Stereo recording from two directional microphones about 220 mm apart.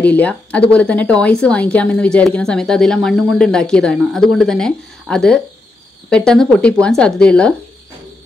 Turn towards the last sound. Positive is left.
turn(degrees=5)  # may be behind; listen again after turning